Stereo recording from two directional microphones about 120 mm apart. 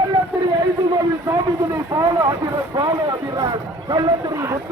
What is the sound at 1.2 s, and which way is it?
Speech, 25° right (ahead or behind).